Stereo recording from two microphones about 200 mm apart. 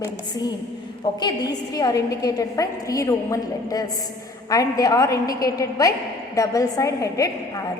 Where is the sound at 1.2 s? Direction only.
20° left (ahead or behind).